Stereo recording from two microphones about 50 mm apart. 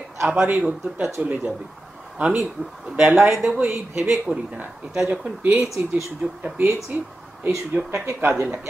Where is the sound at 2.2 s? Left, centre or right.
Centre.